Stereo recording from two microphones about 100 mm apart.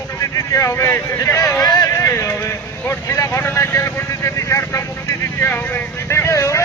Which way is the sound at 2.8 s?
25° left (ahead or behind).